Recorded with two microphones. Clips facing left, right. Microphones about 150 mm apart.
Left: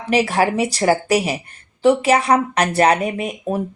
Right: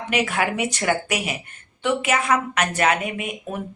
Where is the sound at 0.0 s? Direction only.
35° left (ahead or behind).